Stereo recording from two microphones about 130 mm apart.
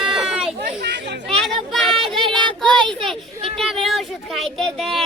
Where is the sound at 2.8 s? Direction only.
40° right (ahead or behind).